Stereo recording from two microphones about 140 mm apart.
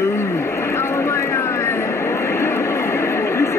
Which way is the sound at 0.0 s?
15° left (ahead or behind).